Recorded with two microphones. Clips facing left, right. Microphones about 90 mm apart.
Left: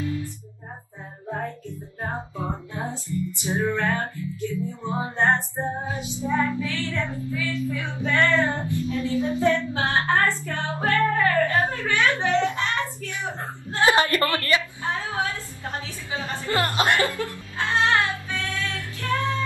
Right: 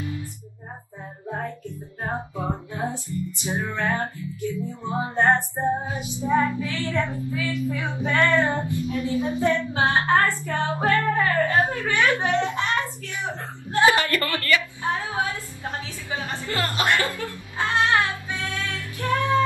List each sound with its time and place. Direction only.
0.0 s music: 20° right (ahead or behind)
2.3 s music: 20° right (ahead or behind)
6.1 s child singing: 20° right (ahead or behind)
13.8 s music: 25° left (ahead or behind)
14.8 s a sound: 15° right (ahead or behind)
16.4 s music: 20° left (ahead or behind)
17.6 s child singing: 20° right (ahead or behind)
18.9 s music: 20° right (ahead or behind)